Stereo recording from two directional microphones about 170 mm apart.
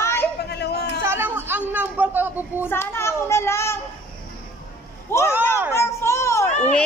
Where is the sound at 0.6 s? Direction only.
75° left (ahead or behind).